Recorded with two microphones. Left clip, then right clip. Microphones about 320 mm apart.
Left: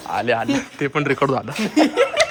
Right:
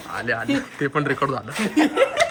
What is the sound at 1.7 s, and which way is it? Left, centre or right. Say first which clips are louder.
Speech: left 2 dB; left.